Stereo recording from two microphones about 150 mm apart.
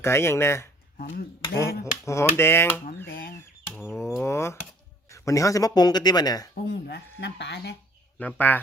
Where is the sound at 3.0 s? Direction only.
75° left (ahead or behind).